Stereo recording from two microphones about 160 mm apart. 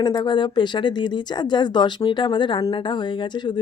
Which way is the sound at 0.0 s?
30° left (ahead or behind).